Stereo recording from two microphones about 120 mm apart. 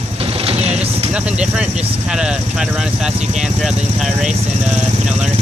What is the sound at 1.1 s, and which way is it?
Speech, 10° right (ahead or behind).